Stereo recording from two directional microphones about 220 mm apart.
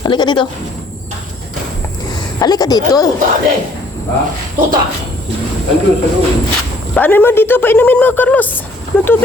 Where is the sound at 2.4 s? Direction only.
15° left (ahead or behind).